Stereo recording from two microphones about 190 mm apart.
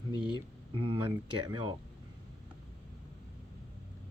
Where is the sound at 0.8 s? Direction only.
30° right (ahead or behind).